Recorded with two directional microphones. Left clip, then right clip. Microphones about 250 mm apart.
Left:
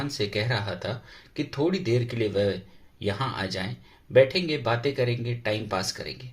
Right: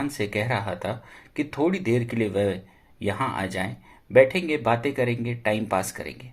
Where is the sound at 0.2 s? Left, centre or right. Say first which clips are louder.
Right 1 dB; right.